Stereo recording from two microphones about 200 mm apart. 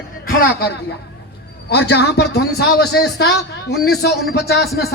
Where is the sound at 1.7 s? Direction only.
55° left (ahead or behind).